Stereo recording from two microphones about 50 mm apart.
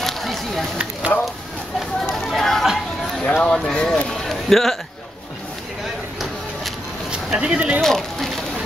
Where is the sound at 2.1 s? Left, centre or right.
Centre.